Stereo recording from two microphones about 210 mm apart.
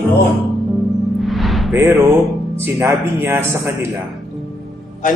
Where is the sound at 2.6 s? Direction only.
10° right (ahead or behind).